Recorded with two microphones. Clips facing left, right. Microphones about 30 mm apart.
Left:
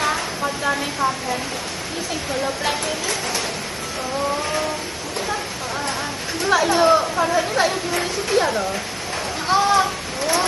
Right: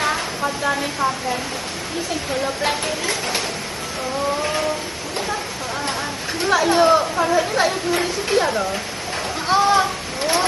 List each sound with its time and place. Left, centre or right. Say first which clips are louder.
0.0 s a sound: right 1 dB; centre
2.3 s speech: right 1 dB; centre
2.8 s speech: right 1 dB; right
4.4 s vehicle: right 1 dB; centre
6.5 s speech: right 1 dB; centre